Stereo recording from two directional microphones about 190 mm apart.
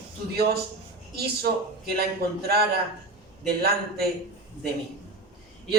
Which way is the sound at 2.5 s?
55° right (ahead or behind).